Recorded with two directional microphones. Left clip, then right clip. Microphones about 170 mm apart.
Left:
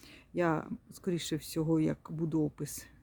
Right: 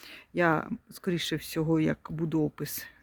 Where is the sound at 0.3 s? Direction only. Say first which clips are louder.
Right 6 dB; 5° right (ahead or behind).